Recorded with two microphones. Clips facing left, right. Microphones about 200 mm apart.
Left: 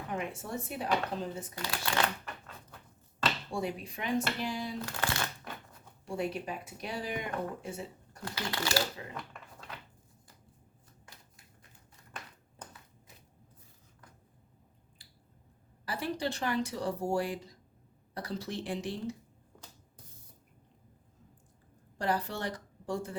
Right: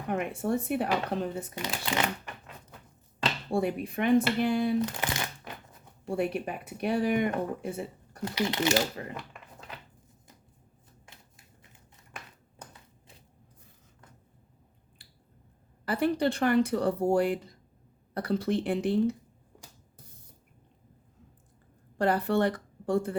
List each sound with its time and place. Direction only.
0.1 s speech: 60° right (ahead or behind)
1.5 s speech: 20° right (ahead or behind)
3.5 s speech: 55° right (ahead or behind)
4.8 s speech: 20° right (ahead or behind)
6.1 s speech: 60° right (ahead or behind)
8.2 s speech: 20° right (ahead or behind)
15.0 s a sound: 60° right (ahead or behind)
15.9 s speech: 55° right (ahead or behind)
21.9 s speech: 55° right (ahead or behind)